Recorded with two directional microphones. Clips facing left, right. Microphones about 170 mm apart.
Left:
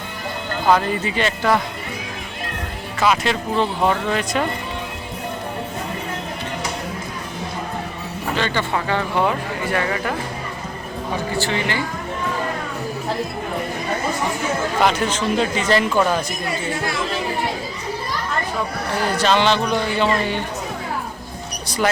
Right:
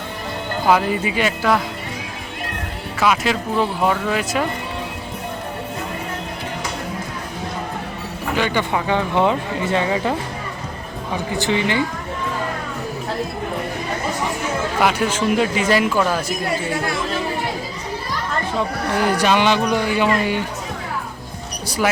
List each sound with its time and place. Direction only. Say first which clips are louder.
0.7 s speech: even; 10° right (ahead or behind)
3.0 s speech: even; 5° right (ahead or behind)
8.4 s speech: right 2 dB; 15° right (ahead or behind)
11.3 s speech: right 5 dB; 20° right (ahead or behind)
14.8 s speech: right 1 dB; 10° right (ahead or behind)
18.9 s speech: right 1 dB; 15° right (ahead or behind)